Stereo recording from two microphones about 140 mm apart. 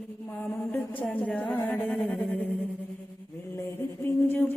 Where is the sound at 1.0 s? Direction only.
10° left (ahead or behind).